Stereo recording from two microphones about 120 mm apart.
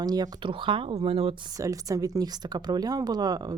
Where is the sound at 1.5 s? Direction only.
30° right (ahead or behind).